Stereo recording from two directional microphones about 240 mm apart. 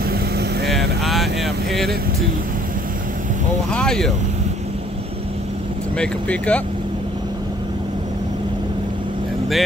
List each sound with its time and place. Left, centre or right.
0.0 s vehicle: right
0.7 s vehicle: centre
3.7 s speech: centre
5.9 s speech: centre